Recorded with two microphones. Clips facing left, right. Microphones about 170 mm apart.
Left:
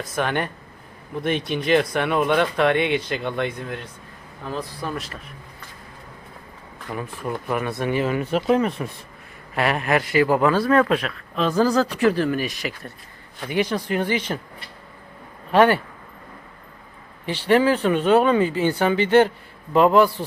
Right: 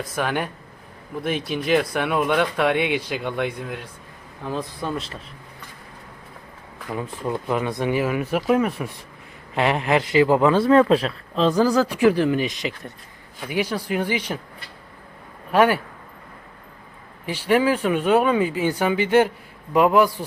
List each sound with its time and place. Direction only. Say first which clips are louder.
0.2 s speech: left 1 dB; 5° right (ahead or behind)
4.4 s speech: right 2 dB; 20° right (ahead or behind)
6.9 s speech: right 2 dB; 20° right (ahead or behind)
11.5 s speech: even; 10° right (ahead or behind)
13.4 s speech: left 2 dB; 5° right (ahead or behind)
15.5 s speech: left 1 dB; 5° right (ahead or behind)
17.2 s speech: left 1 dB; 10° right (ahead or behind)